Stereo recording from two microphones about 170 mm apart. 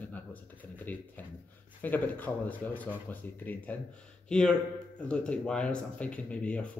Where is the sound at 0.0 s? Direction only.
10° left (ahead or behind).